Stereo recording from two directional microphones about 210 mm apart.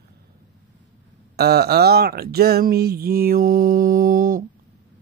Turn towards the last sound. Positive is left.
turn(degrees=-40)  # may be behind; listen again after turning